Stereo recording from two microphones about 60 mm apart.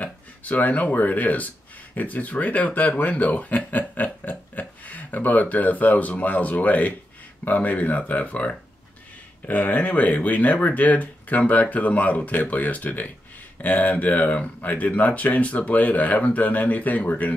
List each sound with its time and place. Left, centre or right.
0.0 s speech: left